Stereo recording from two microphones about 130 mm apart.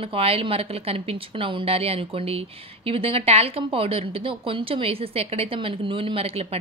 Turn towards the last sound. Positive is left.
turn(degrees=-45)  # may be behind; listen again after turning